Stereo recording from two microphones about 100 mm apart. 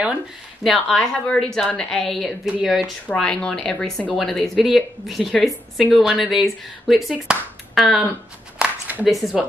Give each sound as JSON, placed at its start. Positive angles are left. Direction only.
{"t": 0.7, "sound": "speech", "side_deg": 5}
{"t": 2.4, "sound": "speech", "side_deg": -10}
{"t": 3.1, "sound": "speech", "side_deg": 10}
{"t": 8.5, "sound": "a sound", "side_deg": -15}
{"t": 9.0, "sound": "speech", "side_deg": 0}